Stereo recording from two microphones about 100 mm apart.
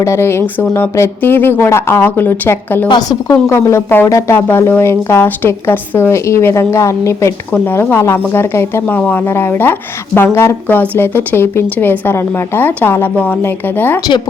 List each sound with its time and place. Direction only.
0.0 s a woman's voice: 25° left (ahead or behind)
2.9 s a woman's voice: 35° left (ahead or behind); by 14.0 s 20° left (ahead or behind)